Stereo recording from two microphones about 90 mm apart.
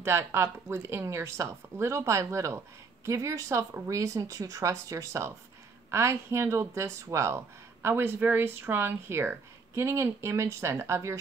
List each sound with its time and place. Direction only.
0.0 s speech: 30° right (ahead or behind)